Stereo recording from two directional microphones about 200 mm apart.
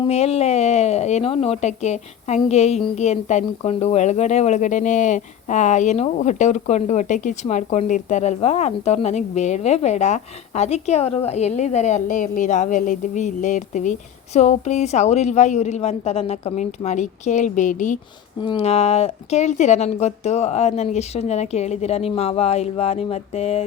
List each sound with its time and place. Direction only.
0.0 s speech: 30° left (ahead or behind)
18.3 s speech: 25° left (ahead or behind)